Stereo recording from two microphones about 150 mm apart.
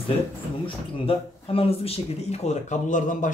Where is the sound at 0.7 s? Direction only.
40° left (ahead or behind).